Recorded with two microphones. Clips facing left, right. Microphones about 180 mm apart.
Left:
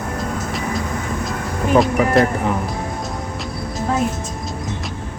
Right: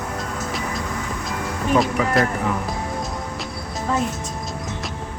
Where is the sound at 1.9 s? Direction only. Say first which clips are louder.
Left 5 dB; 30° left (ahead or behind).